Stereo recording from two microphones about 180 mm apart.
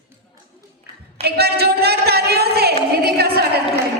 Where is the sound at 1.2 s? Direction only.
60° right (ahead or behind).